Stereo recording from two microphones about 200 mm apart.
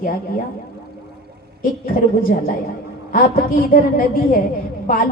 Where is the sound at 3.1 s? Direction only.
45° left (ahead or behind).